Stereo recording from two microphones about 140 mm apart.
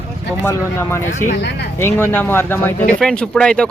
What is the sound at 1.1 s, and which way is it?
Speech, 65° left (ahead or behind).